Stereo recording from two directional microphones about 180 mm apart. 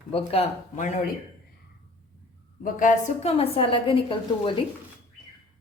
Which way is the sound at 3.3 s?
30° left (ahead or behind).